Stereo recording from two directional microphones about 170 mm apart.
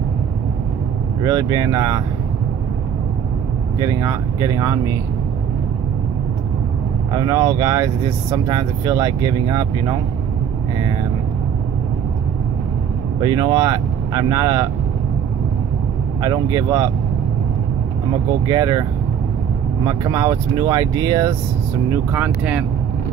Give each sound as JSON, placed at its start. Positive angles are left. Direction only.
{"t": 1.2, "sound": "speech", "side_deg": -20}
{"t": 3.8, "sound": "speech", "side_deg": -20}
{"t": 7.1, "sound": "speech", "side_deg": -20}
{"t": 13.2, "sound": "speech", "side_deg": -25}
{"t": 16.2, "sound": "speech", "side_deg": -20}
{"t": 18.5, "sound": "speech", "side_deg": -25}